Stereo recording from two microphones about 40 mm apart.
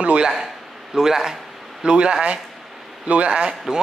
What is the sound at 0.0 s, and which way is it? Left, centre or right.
Speech, right.